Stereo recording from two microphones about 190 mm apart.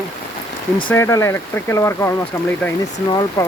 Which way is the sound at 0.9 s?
15° left (ahead or behind).